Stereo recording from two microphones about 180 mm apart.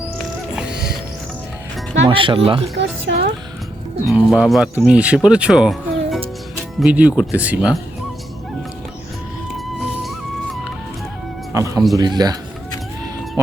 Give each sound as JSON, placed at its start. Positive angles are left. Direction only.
{"t": 0.5, "sound": "music", "side_deg": -5}
{"t": 2.0, "sound": "speech", "side_deg": -30}
{"t": 2.7, "sound": "music", "side_deg": -75}
{"t": 4.0, "sound": "speech", "side_deg": 0}
{"t": 11.5, "sound": "cat", "side_deg": -15}
{"t": 11.9, "sound": "speech", "side_deg": -20}